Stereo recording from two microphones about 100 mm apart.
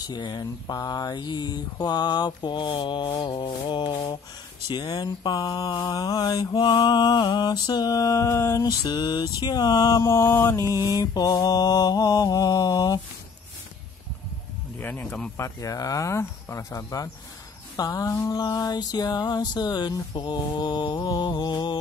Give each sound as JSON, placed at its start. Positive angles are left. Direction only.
{"t": 0.0, "sound": "speech", "side_deg": 45}
{"t": 4.6, "sound": "mantra", "side_deg": 45}
{"t": 6.6, "sound": "speech", "side_deg": 50}
{"t": 8.8, "sound": "speech", "side_deg": 45}
{"t": 9.4, "sound": "mantra", "side_deg": 40}
{"t": 10.8, "sound": "mantra", "side_deg": 40}
{"t": 14.8, "sound": "speech", "side_deg": 20}
{"t": 15.3, "sound": "mantra", "side_deg": 30}
{"t": 18.3, "sound": "speech", "side_deg": 45}